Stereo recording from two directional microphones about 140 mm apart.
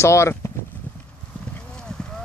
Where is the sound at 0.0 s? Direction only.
20° left (ahead or behind).